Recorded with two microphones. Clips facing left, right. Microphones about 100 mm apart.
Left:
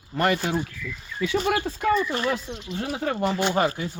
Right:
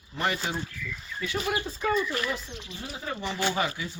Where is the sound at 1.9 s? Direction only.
30° left (ahead or behind).